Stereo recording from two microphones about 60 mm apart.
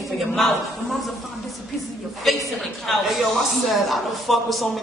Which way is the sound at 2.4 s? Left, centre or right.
Centre.